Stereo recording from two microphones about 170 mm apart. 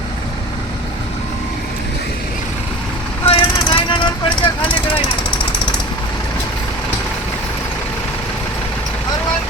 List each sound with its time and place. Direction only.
3.2 s vehicle: 30° left (ahead or behind)